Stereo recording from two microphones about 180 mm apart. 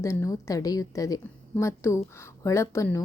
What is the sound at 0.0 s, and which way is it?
A woman's voice, 15° left (ahead or behind).